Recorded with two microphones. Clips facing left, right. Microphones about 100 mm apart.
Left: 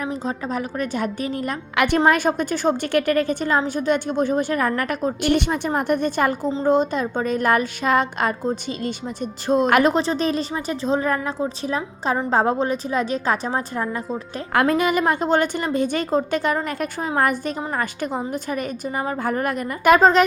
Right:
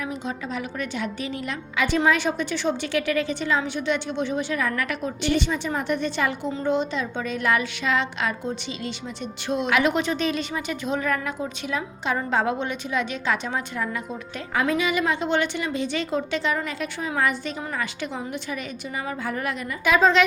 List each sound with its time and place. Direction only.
0.0 s a woman's voice: 40° left (ahead or behind)
1.7 s a woman's voice: 65° left (ahead or behind)
2.0 s a woman's voice: 45° left (ahead or behind)
9.9 s a woman's voice: 35° left (ahead or behind)
14.7 s a woman's voice: 45° left (ahead or behind)